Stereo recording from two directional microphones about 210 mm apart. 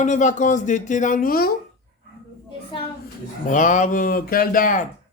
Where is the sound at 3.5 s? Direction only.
35° left (ahead or behind).